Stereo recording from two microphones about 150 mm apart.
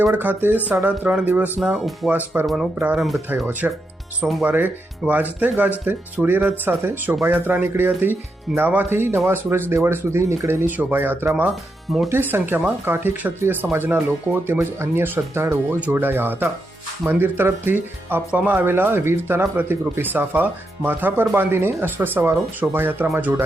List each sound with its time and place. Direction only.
0.0 s speech: 10° right (ahead or behind)
2.1 s speech: 15° right (ahead or behind)
4.4 s speech: 10° right (ahead or behind)
12.0 s speech: 15° right (ahead or behind)